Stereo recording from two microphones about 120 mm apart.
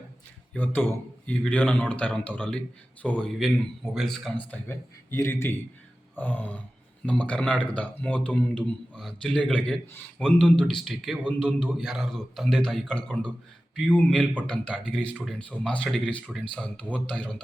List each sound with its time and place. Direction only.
0.5 s a man's voice: 15° left (ahead or behind)
4.4 s a man's voice: 15° left (ahead or behind)